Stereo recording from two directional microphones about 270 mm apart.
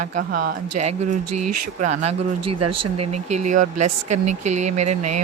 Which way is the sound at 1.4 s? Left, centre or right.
Right.